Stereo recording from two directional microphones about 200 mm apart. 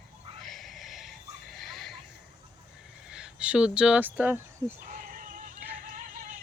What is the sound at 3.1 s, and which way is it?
Speech, 5° right (ahead or behind).